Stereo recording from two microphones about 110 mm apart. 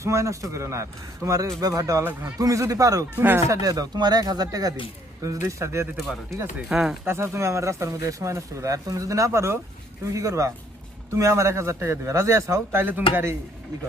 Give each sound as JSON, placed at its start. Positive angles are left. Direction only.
{"t": 0.0, "sound": "speech", "side_deg": -25}
{"t": 3.2, "sound": "speech", "side_deg": -20}
{"t": 3.6, "sound": "speech", "side_deg": -35}
{"t": 6.7, "sound": "speech", "side_deg": -5}
{"t": 7.0, "sound": "speech", "side_deg": -25}